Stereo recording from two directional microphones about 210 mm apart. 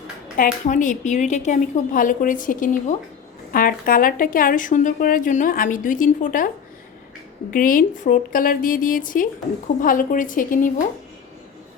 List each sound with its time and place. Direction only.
0.3 s speech: 40° left (ahead or behind)
7.5 s speech: 40° left (ahead or behind)